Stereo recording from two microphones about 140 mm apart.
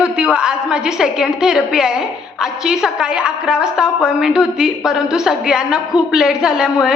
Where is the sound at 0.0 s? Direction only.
5° right (ahead or behind).